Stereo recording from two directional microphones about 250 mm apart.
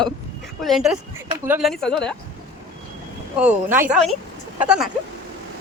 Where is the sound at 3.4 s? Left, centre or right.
Centre.